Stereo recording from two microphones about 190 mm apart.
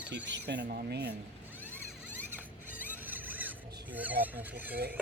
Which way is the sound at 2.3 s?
10° right (ahead or behind).